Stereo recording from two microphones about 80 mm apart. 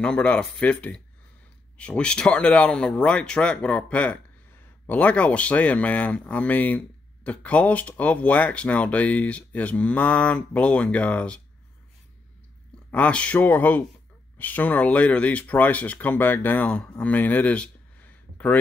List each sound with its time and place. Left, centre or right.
0.0 s speech: centre
12.9 s speech: centre